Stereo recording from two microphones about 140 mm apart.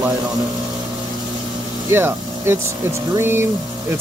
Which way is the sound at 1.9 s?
15° right (ahead or behind).